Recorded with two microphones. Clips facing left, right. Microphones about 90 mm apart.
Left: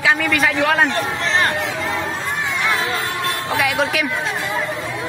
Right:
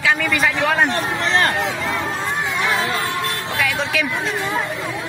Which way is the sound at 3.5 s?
15° left (ahead or behind).